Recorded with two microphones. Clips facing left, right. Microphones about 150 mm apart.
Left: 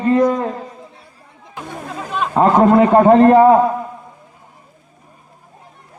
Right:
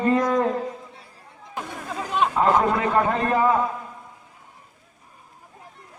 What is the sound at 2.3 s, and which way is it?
A man's voice, 50° left (ahead or behind).